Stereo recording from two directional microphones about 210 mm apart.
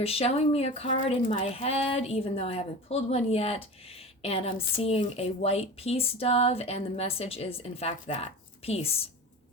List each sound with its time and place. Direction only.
0.0 s a woman's voice: 30° left (ahead or behind)